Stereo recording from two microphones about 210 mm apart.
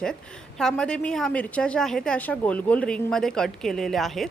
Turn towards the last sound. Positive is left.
turn(degrees=0)  # may be behind; listen again after turning